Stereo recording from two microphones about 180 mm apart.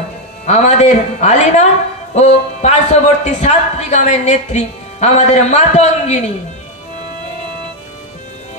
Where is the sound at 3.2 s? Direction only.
40° left (ahead or behind).